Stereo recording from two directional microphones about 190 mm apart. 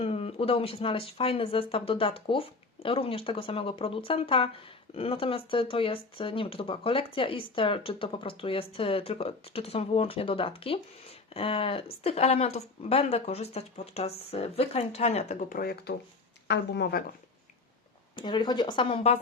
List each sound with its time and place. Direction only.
0.0 s speech: 30° left (ahead or behind); by 17.0 s 60° left (ahead or behind)
18.2 s speech: 25° left (ahead or behind)